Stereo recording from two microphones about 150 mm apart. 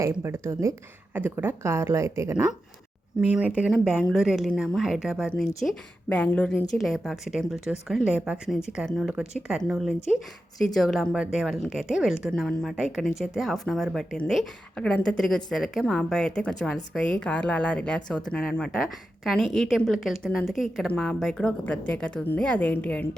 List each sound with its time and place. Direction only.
0.2 s a woman's voice: 20° right (ahead or behind)
3.2 s a woman's voice: 10° right (ahead or behind)
5.6 s a woman's voice: 5° left (ahead or behind)